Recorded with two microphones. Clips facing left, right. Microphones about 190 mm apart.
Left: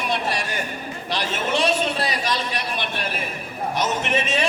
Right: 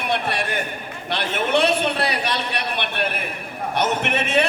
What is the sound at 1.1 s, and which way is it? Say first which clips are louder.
A man's voice: right 3 dB; 60° right (ahead or behind).